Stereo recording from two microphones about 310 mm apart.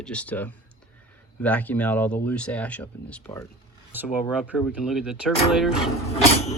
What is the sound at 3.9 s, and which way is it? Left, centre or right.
Speech, centre.